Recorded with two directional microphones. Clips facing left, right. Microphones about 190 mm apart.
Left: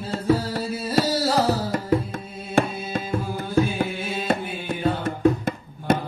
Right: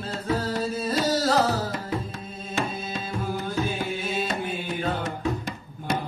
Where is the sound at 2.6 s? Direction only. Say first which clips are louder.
Left 8 dB; 55° left (ahead or behind).